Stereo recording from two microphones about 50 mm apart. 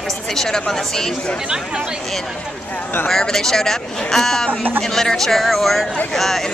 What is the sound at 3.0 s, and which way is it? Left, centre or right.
Speech, centre.